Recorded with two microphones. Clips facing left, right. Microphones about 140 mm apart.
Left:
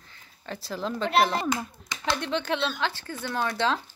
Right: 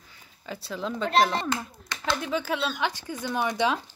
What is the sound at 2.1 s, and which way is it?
Speech, 5° right (ahead or behind).